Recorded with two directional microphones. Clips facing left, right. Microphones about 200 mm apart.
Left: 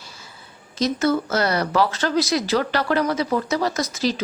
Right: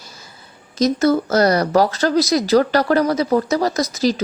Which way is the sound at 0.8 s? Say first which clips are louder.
Right 5 dB; 40° right (ahead or behind).